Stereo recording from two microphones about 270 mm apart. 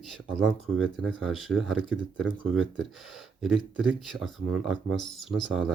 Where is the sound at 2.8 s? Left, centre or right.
Centre.